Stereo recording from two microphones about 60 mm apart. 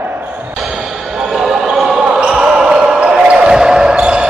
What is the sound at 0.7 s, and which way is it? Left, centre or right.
Basketball bounce, centre.